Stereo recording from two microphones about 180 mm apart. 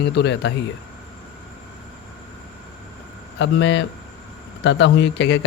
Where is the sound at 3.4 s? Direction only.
80° left.